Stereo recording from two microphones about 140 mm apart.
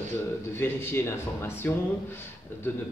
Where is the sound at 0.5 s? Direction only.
15° left (ahead or behind).